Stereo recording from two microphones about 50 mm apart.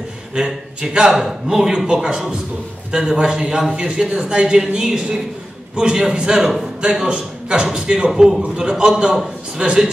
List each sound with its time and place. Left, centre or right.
0.3 s a man's voice: centre
8.1 s a man's voice: centre
8.5 s a man's voice: centre
8.9 s a man's voice: centre
9.6 s a man's voice: right